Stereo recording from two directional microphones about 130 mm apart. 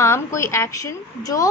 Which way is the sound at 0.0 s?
20° left (ahead or behind).